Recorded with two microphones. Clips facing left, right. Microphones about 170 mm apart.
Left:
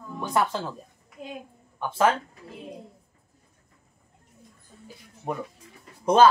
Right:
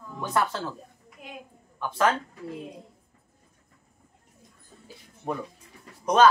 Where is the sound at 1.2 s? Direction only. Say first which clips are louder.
Left 6 dB; 30° left (ahead or behind).